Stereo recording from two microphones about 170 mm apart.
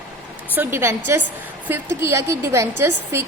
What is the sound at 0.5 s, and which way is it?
A woman's voice, 10° right (ahead or behind).